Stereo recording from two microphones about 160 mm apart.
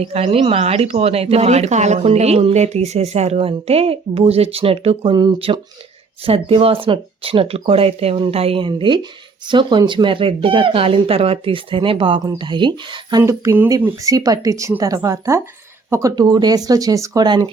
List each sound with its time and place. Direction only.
0.0 s speech: 40° right (ahead or behind)